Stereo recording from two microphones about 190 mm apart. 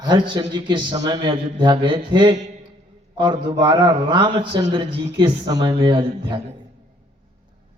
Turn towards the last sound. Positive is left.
turn(degrees=-25)  # may be behind; listen again after turning